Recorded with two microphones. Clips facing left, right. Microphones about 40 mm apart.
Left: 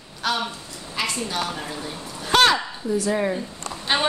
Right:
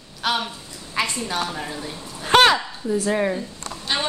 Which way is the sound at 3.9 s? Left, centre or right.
Left.